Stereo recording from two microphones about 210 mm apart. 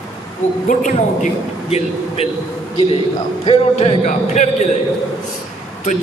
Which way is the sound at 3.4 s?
30° left (ahead or behind).